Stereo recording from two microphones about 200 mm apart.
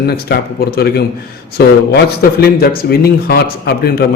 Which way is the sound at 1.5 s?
50° left (ahead or behind).